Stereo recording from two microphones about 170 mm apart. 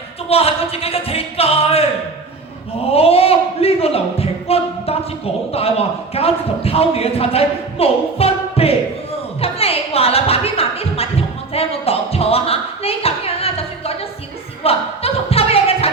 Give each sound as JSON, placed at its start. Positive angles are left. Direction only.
{"t": 0.3, "sound": "music", "side_deg": 35}
{"t": 2.9, "sound": "a man's voice", "side_deg": 35}
{"t": 9.4, "sound": "music", "side_deg": 35}
{"t": 11.5, "sound": "a sound", "side_deg": 35}